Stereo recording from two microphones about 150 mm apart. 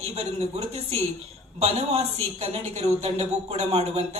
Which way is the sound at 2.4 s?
45° right (ahead or behind).